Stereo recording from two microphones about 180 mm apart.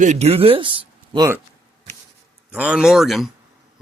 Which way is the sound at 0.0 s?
40° right (ahead or behind).